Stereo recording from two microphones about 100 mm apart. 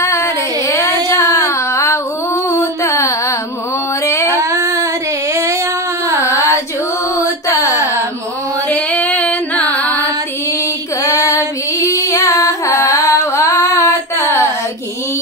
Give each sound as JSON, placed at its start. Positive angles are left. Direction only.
{"t": 0.0, "sound": "child singing", "side_deg": 30}
{"t": 1.0, "sound": "a sound", "side_deg": 25}
{"t": 2.6, "sound": "music", "side_deg": 30}
{"t": 4.0, "sound": "a sound", "side_deg": 30}
{"t": 4.4, "sound": "child singing", "side_deg": -30}
{"t": 5.3, "sound": "female singing", "side_deg": -30}
{"t": 6.2, "sound": "carnatic music", "side_deg": 30}
{"t": 7.2, "sound": "mantra", "side_deg": 35}
{"t": 8.6, "sound": "female singing", "side_deg": 15}
{"t": 11.1, "sound": "female singing", "side_deg": 35}